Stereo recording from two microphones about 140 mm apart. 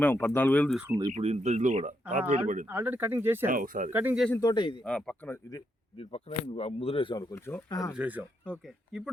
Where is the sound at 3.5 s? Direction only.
80° right.